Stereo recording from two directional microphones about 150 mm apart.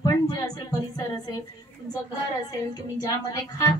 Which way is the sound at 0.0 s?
25° left (ahead or behind).